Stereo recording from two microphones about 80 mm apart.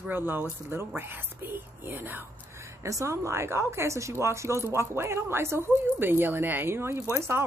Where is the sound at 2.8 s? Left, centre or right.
Right.